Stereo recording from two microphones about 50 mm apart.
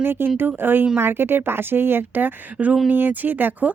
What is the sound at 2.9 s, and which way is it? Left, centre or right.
Speech, right.